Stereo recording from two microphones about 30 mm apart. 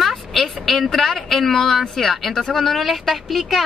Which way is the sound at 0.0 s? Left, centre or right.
Centre.